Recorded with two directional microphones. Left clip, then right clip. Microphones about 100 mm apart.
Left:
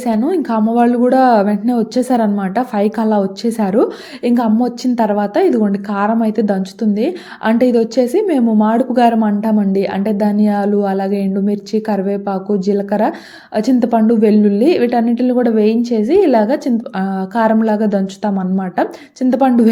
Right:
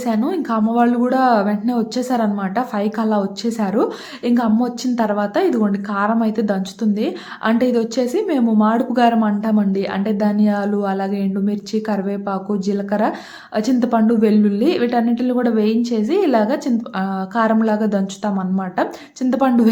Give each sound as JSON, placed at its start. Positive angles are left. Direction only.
{"t": 0.0, "sound": "speech", "side_deg": 25}